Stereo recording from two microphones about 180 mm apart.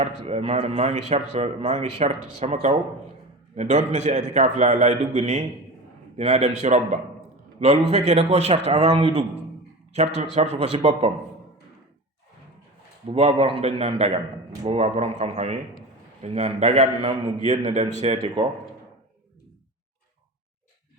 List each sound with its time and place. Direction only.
0.0 s a man's voice: 35° right (ahead or behind)
13.1 s a man's voice: 35° right (ahead or behind)